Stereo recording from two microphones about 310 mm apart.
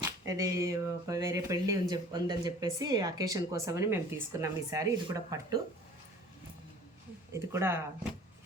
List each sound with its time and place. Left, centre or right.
0.0 s speech: centre
7.3 s speech: centre